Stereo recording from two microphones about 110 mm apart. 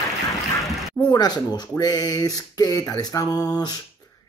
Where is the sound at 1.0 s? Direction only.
40° left (ahead or behind).